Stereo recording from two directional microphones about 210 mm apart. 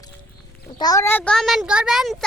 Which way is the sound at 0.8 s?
15° left (ahead or behind).